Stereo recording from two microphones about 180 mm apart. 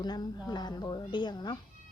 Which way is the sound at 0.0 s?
20° left (ahead or behind).